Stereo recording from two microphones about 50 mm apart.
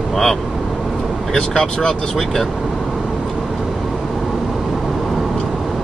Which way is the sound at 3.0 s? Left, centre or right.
Centre.